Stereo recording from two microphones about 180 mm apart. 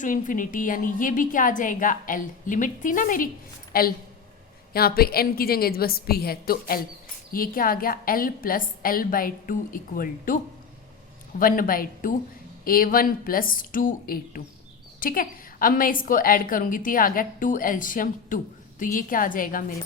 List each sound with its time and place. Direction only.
0.0 s a woman's voice: 45° left (ahead or behind)